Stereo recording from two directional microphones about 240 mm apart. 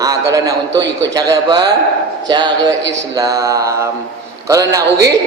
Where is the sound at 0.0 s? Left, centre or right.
Centre.